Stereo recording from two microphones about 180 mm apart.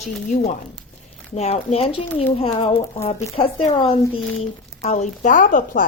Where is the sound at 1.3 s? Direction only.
35° left (ahead or behind).